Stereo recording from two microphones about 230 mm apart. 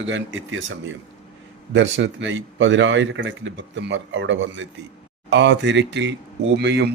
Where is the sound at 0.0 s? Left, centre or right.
Right.